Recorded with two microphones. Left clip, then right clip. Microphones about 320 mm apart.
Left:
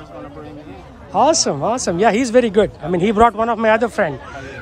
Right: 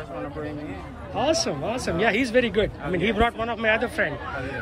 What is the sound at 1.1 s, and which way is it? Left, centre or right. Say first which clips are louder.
A man's voice: left 9 dB; centre.